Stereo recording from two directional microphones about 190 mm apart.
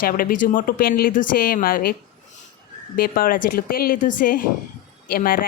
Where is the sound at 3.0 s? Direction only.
50° left (ahead or behind).